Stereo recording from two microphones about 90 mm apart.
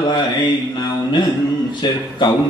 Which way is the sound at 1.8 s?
55° left (ahead or behind).